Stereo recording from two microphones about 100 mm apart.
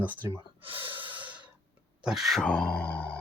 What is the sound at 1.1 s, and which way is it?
Breathing, 15° right (ahead or behind).